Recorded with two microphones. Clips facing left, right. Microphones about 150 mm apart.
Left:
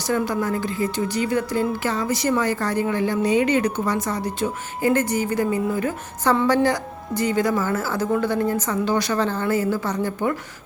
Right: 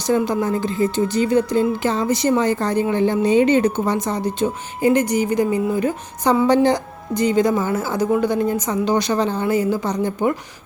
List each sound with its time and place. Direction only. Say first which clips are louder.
0.1 s speech: right 4 dB; 20° right (ahead or behind)